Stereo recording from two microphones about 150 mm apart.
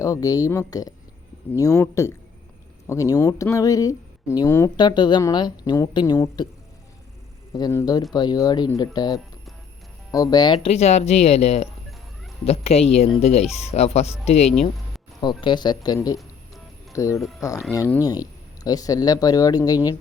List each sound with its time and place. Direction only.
0.0 s speech: 25° left (ahead or behind)
7.5 s speech: 20° left (ahead or behind)
10.7 s speech: 45° left (ahead or behind)
15.2 s speech: 30° left (ahead or behind)